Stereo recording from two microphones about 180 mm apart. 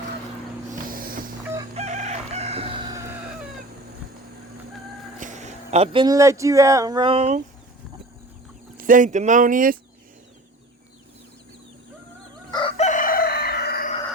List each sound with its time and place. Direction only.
0.7 s vehicle: 50° right (ahead or behind)
1.7 s chicken: 40° right (ahead or behind); by 3.2 s 15° right (ahead or behind)
5.2 s speech: 40° right (ahead or behind)
8.8 s speech: 45° right (ahead or behind)
12.5 s chicken: 25° left (ahead or behind); by 13.9 s 60° left (ahead or behind)